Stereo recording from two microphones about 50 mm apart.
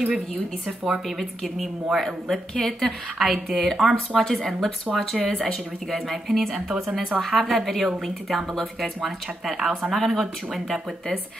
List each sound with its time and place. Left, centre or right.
0.7 s speech: centre
1.0 s a woman's voice: centre
2.0 s a woman's voice: centre